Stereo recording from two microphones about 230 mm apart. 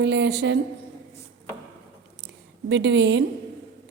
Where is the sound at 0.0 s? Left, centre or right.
Right.